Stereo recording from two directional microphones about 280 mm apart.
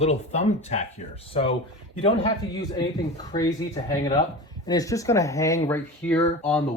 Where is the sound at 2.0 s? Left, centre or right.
Centre.